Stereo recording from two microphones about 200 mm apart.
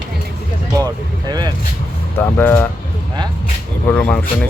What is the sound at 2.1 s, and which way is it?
Speech, 10° left (ahead or behind).